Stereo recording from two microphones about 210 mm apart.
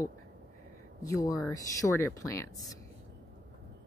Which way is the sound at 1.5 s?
15° left (ahead or behind).